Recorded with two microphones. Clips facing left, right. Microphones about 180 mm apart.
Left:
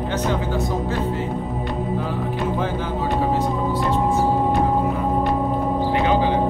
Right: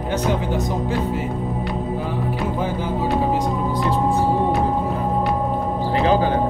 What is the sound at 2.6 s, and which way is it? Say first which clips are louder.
Speech: right 1 dB; 10° right (ahead or behind).